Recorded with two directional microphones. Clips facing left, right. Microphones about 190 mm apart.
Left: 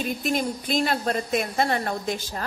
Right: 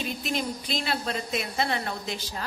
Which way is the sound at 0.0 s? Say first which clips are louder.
Left 5 dB; 45° left (ahead or behind).